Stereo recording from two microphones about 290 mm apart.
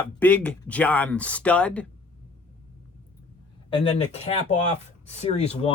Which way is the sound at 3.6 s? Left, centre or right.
Centre.